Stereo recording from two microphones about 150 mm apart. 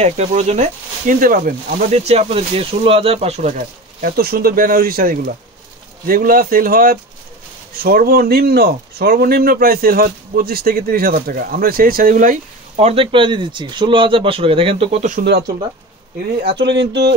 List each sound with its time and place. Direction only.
0.0 s speech: 50° right (ahead or behind)
4.0 s speech: 85° right
7.8 s speech: 85° right; by 12.4 s 65° right (ahead or behind)
12.7 s speech: 40° right (ahead or behind); by 15.5 s 75° right (ahead or behind)